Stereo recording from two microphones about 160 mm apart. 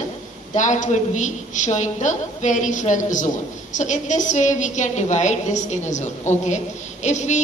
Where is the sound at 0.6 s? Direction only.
50° left (ahead or behind).